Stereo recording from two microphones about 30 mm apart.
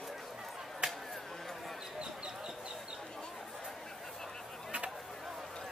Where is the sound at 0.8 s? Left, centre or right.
Right.